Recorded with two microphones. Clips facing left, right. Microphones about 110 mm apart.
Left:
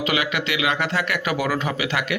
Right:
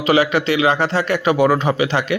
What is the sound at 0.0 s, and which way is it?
Speech, 35° right (ahead or behind).